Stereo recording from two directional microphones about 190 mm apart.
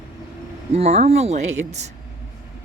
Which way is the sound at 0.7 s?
35° right (ahead or behind).